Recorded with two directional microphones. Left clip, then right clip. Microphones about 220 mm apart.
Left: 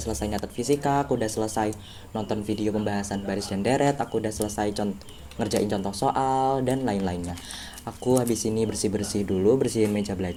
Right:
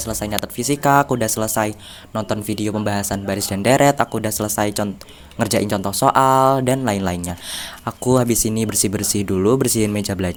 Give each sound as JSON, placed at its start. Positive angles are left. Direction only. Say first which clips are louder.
{"t": 0.0, "sound": "speech", "louder": "right 6 dB", "side_deg": -35}